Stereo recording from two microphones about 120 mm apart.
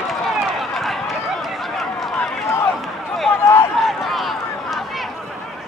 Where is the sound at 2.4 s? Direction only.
20° left (ahead or behind).